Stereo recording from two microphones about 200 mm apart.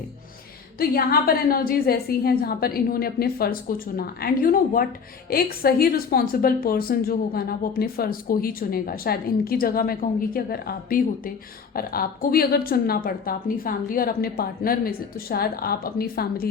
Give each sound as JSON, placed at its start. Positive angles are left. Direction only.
{"t": 0.8, "sound": "a woman's voice", "side_deg": 50}